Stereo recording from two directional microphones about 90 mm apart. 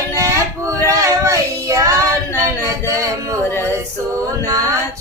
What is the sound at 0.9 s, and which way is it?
Child singing, 35° right (ahead or behind).